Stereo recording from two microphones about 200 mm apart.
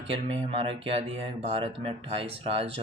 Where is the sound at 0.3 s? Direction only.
30° right (ahead or behind).